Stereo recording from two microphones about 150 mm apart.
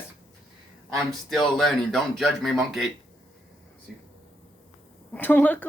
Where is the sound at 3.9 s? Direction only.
Centre (ahead or behind).